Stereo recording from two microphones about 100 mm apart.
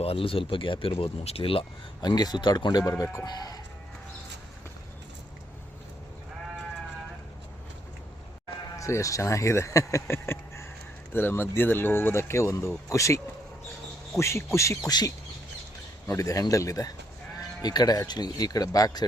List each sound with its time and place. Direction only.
0.0 s speech: 70° left (ahead or behind)
2.0 s speech: 45° left (ahead or behind)
8.7 s speech: 30° left (ahead or behind)
14.8 s speech: 40° left (ahead or behind)